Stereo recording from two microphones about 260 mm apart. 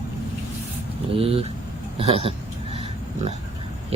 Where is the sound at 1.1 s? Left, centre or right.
Right.